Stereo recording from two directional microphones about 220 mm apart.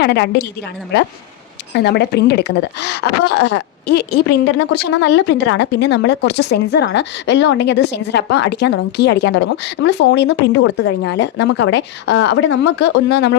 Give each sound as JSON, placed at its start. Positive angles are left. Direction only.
{"t": 0.0, "sound": "speech", "side_deg": 50}
{"t": 1.7, "sound": "speech", "side_deg": 50}